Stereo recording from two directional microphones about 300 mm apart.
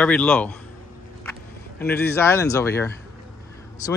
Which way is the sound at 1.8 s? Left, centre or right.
Centre.